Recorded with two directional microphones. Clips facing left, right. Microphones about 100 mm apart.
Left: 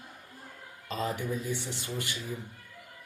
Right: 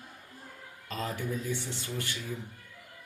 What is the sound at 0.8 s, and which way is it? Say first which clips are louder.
Speech: left 2 dB; 20° left (ahead or behind).